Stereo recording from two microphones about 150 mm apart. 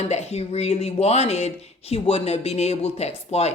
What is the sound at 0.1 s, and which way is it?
Speech, 45° left (ahead or behind).